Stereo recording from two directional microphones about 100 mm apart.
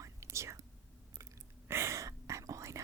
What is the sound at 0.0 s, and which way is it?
Whispering, 30° right (ahead or behind).